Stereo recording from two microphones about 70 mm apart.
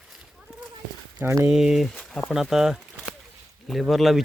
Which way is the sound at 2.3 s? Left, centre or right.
Centre.